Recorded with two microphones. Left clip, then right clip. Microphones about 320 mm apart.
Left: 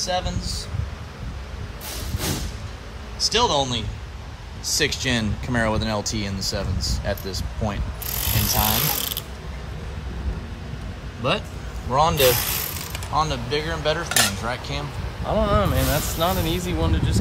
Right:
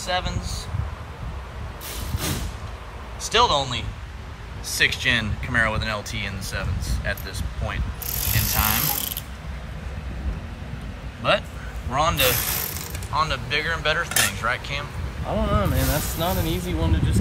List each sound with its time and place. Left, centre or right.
0.0 s speech: centre
3.3 s speech: centre
4.7 s speech: centre
8.3 s a sound: centre
8.7 s speech: centre
11.9 s speech: centre
12.2 s speech: centre
13.1 s speech: centre
14.0 s speech: centre
14.4 s speech: centre